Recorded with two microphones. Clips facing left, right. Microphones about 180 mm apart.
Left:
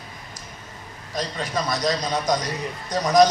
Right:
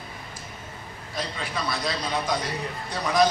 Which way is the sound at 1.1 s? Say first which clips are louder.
Left 5 dB; 40° left (ahead or behind).